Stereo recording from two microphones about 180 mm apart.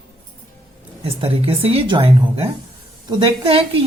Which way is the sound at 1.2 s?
30° right (ahead or behind).